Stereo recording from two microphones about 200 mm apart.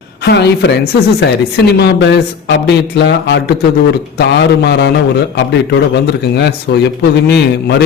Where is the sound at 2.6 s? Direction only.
55° left (ahead or behind).